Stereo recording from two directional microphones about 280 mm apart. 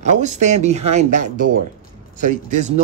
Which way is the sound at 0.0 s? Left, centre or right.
Right.